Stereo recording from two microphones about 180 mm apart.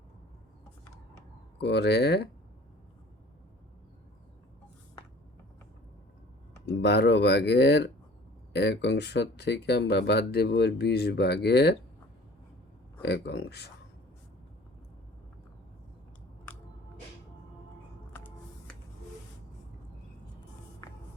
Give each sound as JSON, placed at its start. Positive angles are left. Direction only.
{"t": 1.1, "sound": "a sound", "side_deg": 70}
{"t": 6.7, "sound": "speech", "side_deg": 65}
{"t": 13.0, "sound": "speech", "side_deg": 70}
{"t": 20.8, "sound": "music", "side_deg": 20}